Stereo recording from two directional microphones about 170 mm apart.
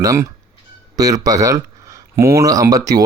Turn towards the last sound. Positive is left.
turn(degrees=-20)  # may be behind; listen again after turning